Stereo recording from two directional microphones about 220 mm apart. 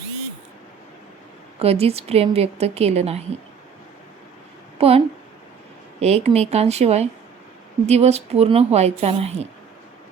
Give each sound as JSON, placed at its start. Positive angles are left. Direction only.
{"t": 1.5, "sound": "a woman's voice", "side_deg": -25}
{"t": 4.8, "sound": "a woman's voice", "side_deg": -25}